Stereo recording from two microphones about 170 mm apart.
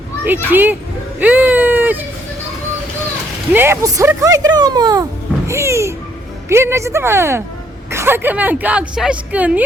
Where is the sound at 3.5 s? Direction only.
15° right (ahead or behind).